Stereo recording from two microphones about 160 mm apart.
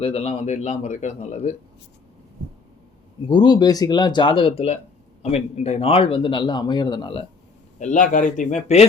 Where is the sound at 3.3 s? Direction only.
25° left (ahead or behind).